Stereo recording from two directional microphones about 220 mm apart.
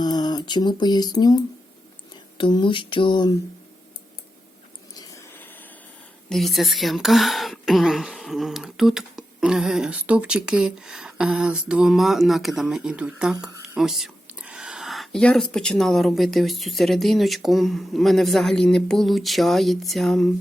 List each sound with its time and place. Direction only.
0.0 s speech: 20° left (ahead or behind)
4.9 s a sound: 15° left (ahead or behind)
6.2 s speech: centre (ahead or behind)